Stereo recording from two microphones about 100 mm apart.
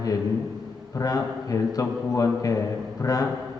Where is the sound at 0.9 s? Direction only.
35° left (ahead or behind).